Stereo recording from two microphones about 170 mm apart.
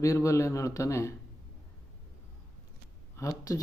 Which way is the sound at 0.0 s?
20° left (ahead or behind).